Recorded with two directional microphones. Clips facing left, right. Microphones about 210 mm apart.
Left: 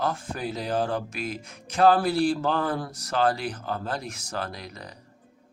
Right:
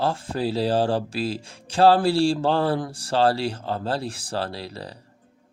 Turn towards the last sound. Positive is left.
turn(degrees=-30)  # may be behind; listen again after turning